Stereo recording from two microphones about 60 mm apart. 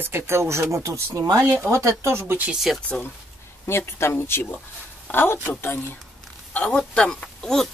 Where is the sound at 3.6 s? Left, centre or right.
Left.